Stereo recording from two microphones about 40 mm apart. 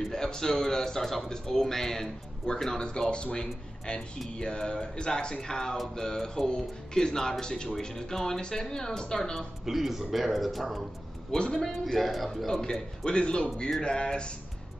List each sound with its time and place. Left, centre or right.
0.1 s a man's voice: centre
9.7 s a man's voice: centre
11.3 s speech: centre
11.7 s a man's voice: centre
13.0 s speech: left